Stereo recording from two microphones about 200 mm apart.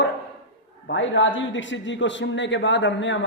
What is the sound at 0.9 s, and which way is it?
A man's voice, 70° left (ahead or behind).